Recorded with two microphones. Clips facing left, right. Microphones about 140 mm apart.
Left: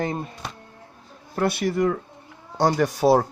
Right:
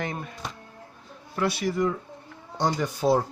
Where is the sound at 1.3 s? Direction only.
55° left (ahead or behind).